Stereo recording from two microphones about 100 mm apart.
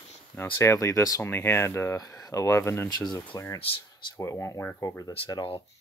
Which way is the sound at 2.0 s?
35° left (ahead or behind).